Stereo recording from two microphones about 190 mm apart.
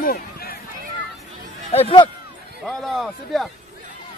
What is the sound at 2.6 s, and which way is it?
Speech, centre (ahead or behind).